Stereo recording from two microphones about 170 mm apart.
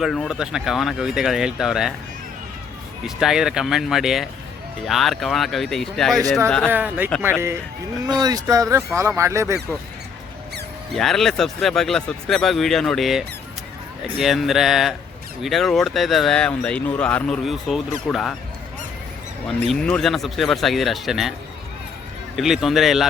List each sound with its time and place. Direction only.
0.0 s speech: centre (ahead or behind)
3.2 s speech: 5° right (ahead or behind)
6.7 s speech: 10° right (ahead or behind)
10.9 s speech: centre (ahead or behind)
19.8 s speech: 5° left (ahead or behind)
22.4 s speech: centre (ahead or behind)